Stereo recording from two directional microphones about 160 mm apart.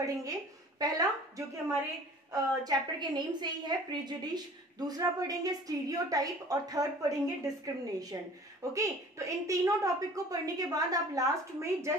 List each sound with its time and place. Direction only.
0.0 s a woman's voice: 20° right (ahead or behind)
2.6 s a woman's voice: 30° right (ahead or behind)